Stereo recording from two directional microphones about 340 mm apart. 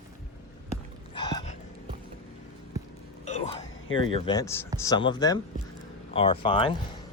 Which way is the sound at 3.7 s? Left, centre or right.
Left.